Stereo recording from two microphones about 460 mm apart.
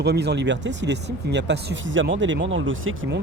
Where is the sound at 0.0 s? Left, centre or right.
Right.